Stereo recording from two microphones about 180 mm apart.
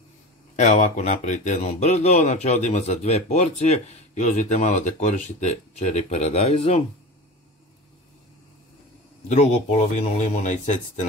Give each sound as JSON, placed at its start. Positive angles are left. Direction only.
{"t": 0.6, "sound": "speech", "side_deg": 40}
{"t": 9.3, "sound": "speech", "side_deg": 40}